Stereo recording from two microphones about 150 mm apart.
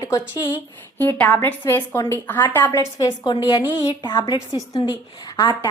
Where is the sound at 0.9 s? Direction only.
10° left (ahead or behind).